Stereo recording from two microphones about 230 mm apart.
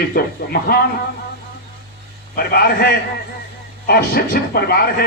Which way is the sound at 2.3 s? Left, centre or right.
Left.